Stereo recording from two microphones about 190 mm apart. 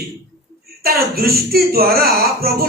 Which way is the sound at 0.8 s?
55° right (ahead or behind).